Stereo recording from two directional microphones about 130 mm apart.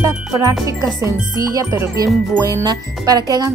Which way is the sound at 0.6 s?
25° right (ahead or behind).